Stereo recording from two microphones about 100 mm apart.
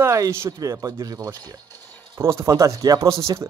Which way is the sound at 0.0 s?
30° right (ahead or behind).